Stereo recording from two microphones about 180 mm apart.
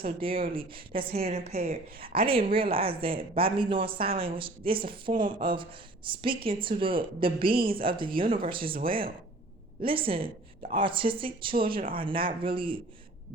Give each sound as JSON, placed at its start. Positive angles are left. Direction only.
{"t": 0.2, "sound": "speech", "side_deg": -30}
{"t": 9.8, "sound": "speech", "side_deg": -30}
{"t": 11.8, "sound": "speech", "side_deg": -50}
{"t": 12.0, "sound": "speech", "side_deg": -30}